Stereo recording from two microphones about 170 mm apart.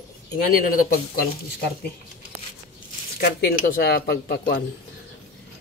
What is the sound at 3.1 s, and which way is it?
Speech, 60° left (ahead or behind).